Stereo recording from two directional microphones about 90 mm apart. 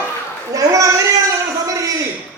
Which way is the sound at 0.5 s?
40° right (ahead or behind).